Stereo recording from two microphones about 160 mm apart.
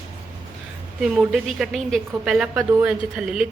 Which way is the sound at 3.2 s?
5° right (ahead or behind).